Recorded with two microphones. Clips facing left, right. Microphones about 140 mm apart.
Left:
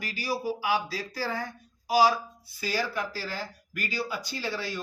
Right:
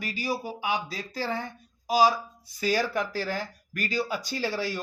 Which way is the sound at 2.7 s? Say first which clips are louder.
Right 3 dB; 45° right (ahead or behind).